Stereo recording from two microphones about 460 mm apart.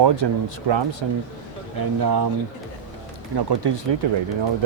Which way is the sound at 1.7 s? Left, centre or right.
Right.